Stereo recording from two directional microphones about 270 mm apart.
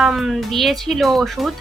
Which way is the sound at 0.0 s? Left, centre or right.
Centre.